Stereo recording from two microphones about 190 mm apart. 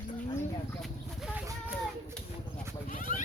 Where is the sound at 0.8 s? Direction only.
Centre (ahead or behind).